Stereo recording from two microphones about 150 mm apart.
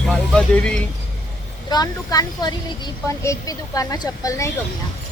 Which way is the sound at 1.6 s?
25° left (ahead or behind).